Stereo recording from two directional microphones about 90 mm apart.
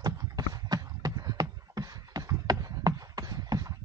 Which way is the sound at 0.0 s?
50° right (ahead or behind).